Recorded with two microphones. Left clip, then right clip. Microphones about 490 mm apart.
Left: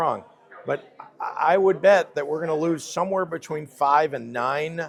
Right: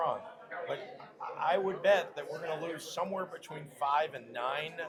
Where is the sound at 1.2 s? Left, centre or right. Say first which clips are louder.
Left 11 dB; left.